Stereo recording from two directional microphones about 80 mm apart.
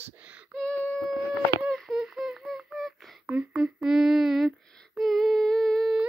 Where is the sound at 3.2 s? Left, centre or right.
Centre.